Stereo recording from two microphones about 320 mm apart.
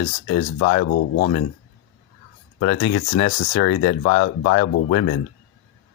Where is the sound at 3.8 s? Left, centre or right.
Left.